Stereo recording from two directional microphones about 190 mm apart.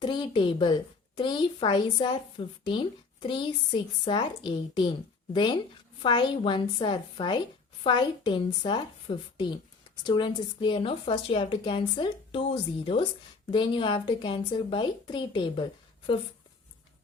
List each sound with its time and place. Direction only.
0.0 s a child's voice: 25° left (ahead or behind)